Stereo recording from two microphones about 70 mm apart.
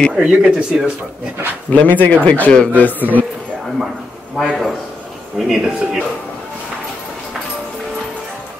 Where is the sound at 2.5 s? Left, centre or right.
Centre.